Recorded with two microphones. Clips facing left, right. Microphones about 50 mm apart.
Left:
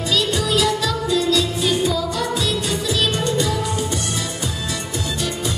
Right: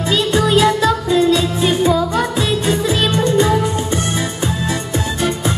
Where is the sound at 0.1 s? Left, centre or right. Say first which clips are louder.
Right 6 dB; right.